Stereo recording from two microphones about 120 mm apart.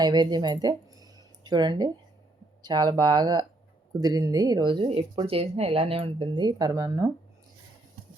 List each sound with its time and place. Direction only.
0.0 s speech: 35° right (ahead or behind); by 6.2 s 50° right (ahead or behind)
6.3 s speech: 35° right (ahead or behind)
6.7 s speech: 25° right (ahead or behind)